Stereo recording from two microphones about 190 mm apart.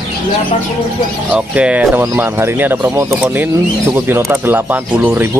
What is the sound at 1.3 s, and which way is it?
A man's voice, 5° right (ahead or behind).